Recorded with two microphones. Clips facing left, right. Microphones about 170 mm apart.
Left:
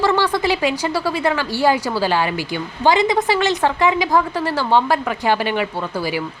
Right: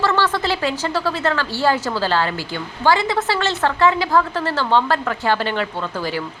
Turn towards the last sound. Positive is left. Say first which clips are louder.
# left 2 dB
turn(degrees=10)  # may be behind; listen again after turning